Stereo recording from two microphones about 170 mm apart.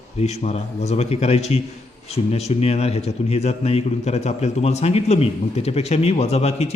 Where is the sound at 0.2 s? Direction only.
40° left (ahead or behind).